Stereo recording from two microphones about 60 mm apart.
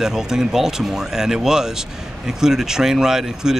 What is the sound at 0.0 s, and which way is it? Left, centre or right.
Speech, centre.